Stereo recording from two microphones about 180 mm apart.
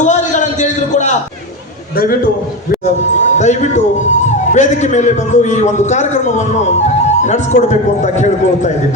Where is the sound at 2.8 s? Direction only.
40° left (ahead or behind).